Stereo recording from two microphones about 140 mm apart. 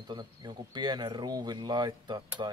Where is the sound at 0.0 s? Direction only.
30° right (ahead or behind).